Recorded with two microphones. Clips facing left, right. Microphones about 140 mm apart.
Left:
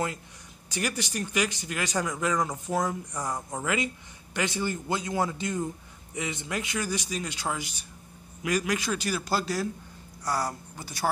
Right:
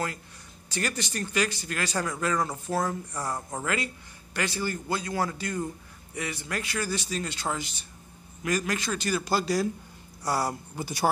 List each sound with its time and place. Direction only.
0.7 s a man's voice: 15° left (ahead or behind); by 11.1 s 15° right (ahead or behind)